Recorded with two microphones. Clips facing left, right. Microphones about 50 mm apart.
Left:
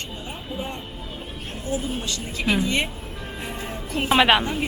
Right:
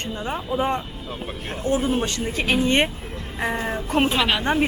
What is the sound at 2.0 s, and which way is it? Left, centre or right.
Speech, right.